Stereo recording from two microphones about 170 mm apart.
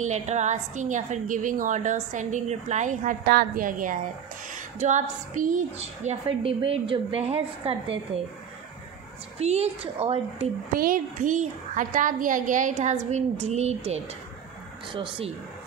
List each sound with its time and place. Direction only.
0.0 s a woman's voice: 45° right (ahead or behind)
9.4 s a woman's voice: 40° right (ahead or behind)
10.7 s a woman's voice: 55° right (ahead or behind); by 15.3 s 30° right (ahead or behind)